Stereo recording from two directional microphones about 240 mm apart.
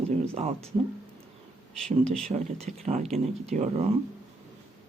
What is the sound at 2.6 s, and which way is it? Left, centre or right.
Speech, right.